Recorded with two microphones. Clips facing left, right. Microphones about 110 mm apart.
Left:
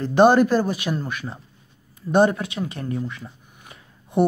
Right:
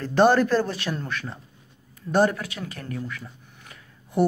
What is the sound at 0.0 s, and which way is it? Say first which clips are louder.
Speech: left 3 dB; 15° left (ahead or behind).